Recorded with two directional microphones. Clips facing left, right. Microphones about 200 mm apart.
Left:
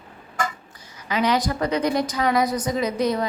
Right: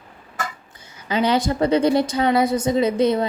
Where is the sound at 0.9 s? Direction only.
30° right (ahead or behind).